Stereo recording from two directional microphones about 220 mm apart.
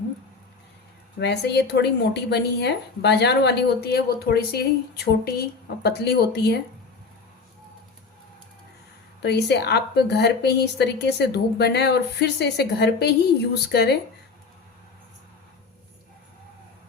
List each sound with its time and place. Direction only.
1.2 s a woman's voice: 50° left (ahead or behind)
9.2 s a woman's voice: 50° left (ahead or behind)